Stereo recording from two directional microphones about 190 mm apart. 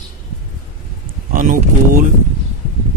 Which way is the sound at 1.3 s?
45° right (ahead or behind).